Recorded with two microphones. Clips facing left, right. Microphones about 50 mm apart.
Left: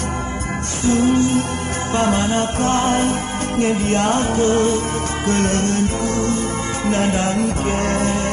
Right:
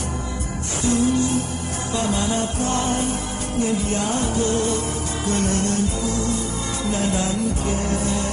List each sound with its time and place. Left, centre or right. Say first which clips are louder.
0.8 s music: left 4 dB; left